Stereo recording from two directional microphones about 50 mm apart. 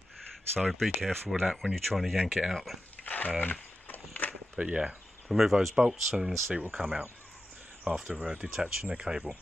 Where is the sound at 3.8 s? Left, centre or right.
Left.